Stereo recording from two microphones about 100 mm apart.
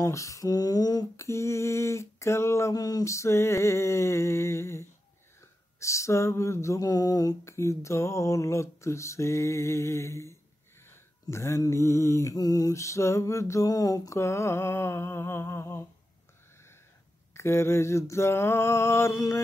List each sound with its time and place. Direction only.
0.0 s a sound: 30° left (ahead or behind)
1.1 s mantra: 30° left (ahead or behind)
7.4 s mantra: 30° left (ahead or behind)
17.3 s mantra: 25° left (ahead or behind)